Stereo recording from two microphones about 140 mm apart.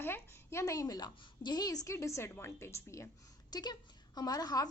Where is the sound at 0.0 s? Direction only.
15° left (ahead or behind).